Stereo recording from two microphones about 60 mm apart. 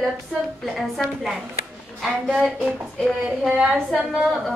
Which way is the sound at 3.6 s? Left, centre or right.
Centre.